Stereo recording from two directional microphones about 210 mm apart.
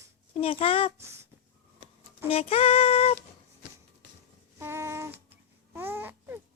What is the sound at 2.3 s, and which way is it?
Female singing, 30° left (ahead or behind).